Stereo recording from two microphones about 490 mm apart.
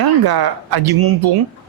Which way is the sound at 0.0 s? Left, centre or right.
Right.